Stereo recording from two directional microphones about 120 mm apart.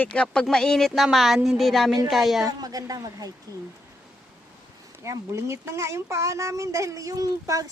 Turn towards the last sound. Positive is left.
turn(degrees=-30)  # may be behind; listen again after turning